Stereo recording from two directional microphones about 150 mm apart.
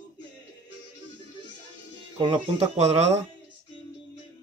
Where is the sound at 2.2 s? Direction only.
35° right (ahead or behind).